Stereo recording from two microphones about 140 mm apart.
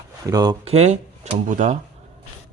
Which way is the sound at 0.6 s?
50° right (ahead or behind).